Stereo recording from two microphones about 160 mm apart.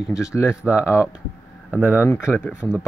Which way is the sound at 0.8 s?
15° left (ahead or behind).